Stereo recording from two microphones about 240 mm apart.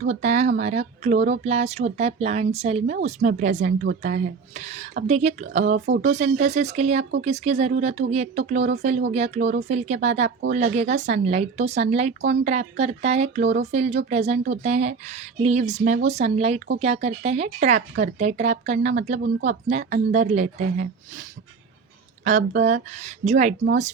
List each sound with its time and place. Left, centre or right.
0.1 s speech: right